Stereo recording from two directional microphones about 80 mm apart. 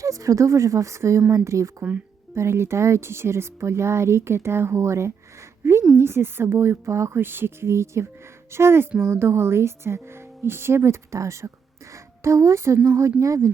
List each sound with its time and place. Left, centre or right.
0.0 s speech: right